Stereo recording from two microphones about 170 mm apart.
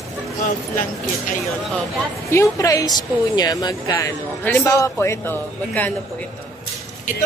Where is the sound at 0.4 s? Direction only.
50° left (ahead or behind).